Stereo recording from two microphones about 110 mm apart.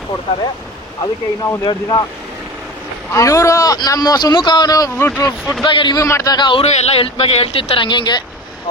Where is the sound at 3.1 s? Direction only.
30° left (ahead or behind).